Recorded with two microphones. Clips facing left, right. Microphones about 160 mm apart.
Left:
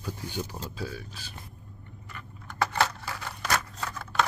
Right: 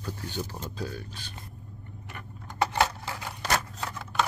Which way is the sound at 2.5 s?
20° right (ahead or behind).